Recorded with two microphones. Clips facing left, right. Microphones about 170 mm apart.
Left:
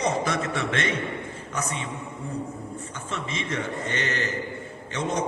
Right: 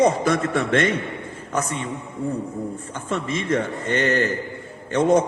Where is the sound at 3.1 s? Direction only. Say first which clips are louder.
Right 9 dB; 50° right (ahead or behind).